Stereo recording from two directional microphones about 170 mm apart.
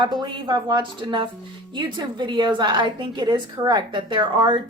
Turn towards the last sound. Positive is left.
turn(degrees=-30)  # may be behind; listen again after turning